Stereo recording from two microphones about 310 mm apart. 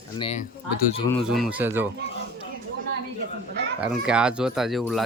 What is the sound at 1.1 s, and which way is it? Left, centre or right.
Speech, centre.